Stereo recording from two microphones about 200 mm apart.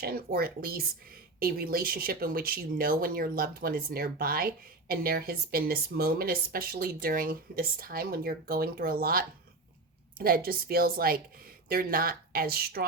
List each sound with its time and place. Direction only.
0.0 s speech: 50° right (ahead or behind)